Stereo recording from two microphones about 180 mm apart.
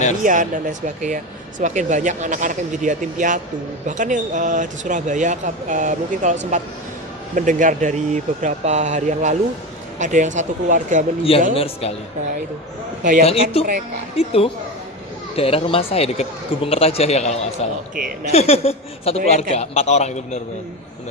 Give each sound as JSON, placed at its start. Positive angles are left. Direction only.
{"t": 0.2, "sound": "speech", "side_deg": -45}
{"t": 7.3, "sound": "speech", "side_deg": -45}
{"t": 11.2, "sound": "speech", "side_deg": 30}
{"t": 13.2, "sound": "speech", "side_deg": 35}
{"t": 17.9, "sound": "speech", "side_deg": -50}
{"t": 18.3, "sound": "speech", "side_deg": 35}